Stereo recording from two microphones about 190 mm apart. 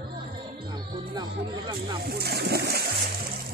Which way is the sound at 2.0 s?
55° right (ahead or behind).